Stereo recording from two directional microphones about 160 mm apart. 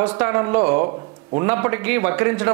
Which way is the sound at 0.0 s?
10° right (ahead or behind).